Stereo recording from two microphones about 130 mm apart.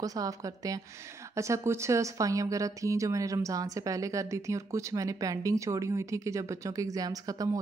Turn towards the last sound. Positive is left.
turn(degrees=-30)  # may be behind; listen again after turning